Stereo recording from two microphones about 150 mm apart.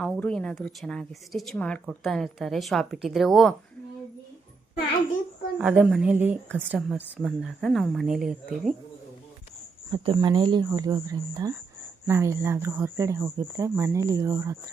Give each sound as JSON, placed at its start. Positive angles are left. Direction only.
{"t": 0.0, "sound": "a woman's voice", "side_deg": 5}
{"t": 5.5, "sound": "a woman's voice", "side_deg": -5}
{"t": 9.9, "sound": "a woman's voice", "side_deg": -30}